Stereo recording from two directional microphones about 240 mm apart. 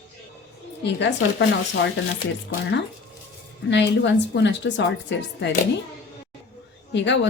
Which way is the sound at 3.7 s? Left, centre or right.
Left.